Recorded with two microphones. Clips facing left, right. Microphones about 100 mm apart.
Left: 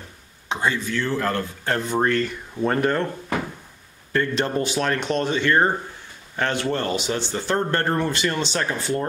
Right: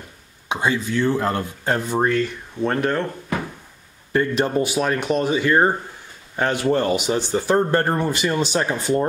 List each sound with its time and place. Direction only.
0.5 s speech: 15° right (ahead or behind)
1.9 s speech: 5° right (ahead or behind)
4.1 s speech: 15° right (ahead or behind)